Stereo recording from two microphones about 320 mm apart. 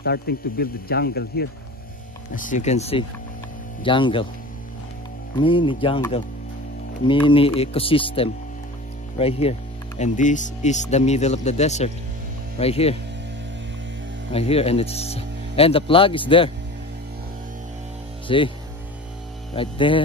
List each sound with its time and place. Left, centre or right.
0.0 s speech: left
5.4 s speech: centre
14.3 s speech: centre
18.2 s speech: centre
19.5 s speech: centre